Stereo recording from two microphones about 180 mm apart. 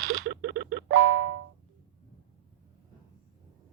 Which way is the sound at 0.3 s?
80° right.